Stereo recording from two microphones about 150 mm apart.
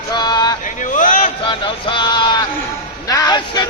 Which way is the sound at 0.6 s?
60° left (ahead or behind).